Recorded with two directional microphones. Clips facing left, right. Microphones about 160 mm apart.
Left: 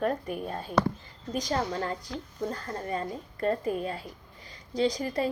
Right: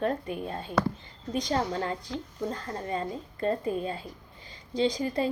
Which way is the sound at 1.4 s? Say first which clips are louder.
Right 1 dB; 25° right (ahead or behind).